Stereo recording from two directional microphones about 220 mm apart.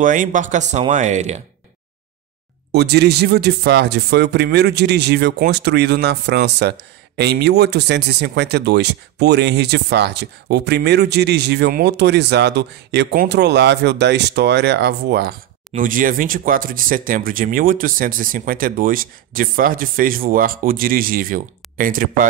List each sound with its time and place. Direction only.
0.0 s speech: 35° right (ahead or behind)
2.7 s speech: 50° right (ahead or behind)